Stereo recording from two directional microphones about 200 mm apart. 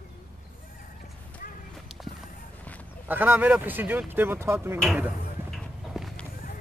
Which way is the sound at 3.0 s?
10° right (ahead or behind).